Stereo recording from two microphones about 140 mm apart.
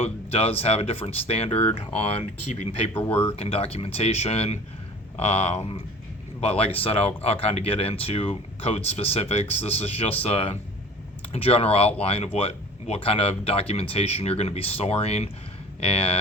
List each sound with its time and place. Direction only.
0.0 s speech: 45° left (ahead or behind)